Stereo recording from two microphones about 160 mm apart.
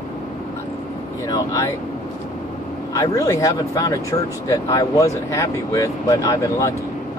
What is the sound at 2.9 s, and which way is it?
Speech, 20° left (ahead or behind).